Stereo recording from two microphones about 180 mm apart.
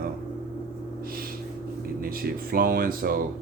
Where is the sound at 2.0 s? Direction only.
55° right (ahead or behind).